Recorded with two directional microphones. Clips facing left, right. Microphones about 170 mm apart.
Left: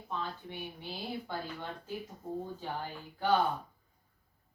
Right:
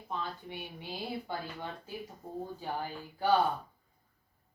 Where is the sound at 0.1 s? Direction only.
15° right (ahead or behind).